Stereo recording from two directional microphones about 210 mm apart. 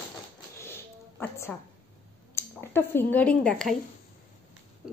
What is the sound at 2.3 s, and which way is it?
Speech, 10° left (ahead or behind).